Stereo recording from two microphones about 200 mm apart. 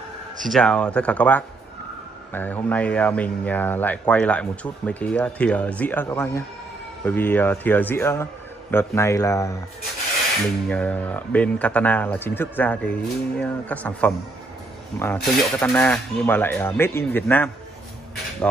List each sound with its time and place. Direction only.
0.5 s speech: 5° left (ahead or behind)
10.7 s speech: 10° left (ahead or behind)